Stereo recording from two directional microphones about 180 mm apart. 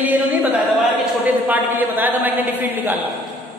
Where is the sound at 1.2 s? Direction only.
10° right (ahead or behind).